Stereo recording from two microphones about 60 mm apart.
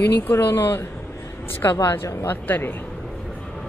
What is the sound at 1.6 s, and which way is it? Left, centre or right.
Speech, left.